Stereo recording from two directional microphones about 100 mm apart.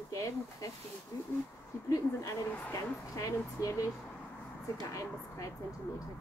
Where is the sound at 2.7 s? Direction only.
30° left (ahead or behind).